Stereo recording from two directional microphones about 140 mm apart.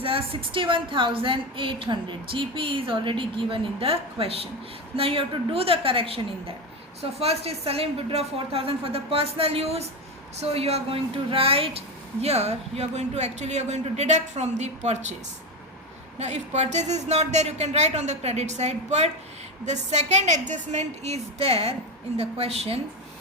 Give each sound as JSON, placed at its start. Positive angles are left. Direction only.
{"t": 0.0, "sound": "a woman's voice", "side_deg": -40}
{"t": 16.1, "sound": "speech", "side_deg": -55}